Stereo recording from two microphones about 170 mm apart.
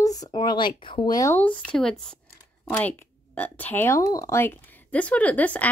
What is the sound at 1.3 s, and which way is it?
Speech, 10° left (ahead or behind).